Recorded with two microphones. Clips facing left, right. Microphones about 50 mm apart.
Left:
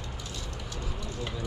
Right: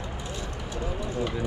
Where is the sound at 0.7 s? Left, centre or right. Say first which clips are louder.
Right 9 dB; right.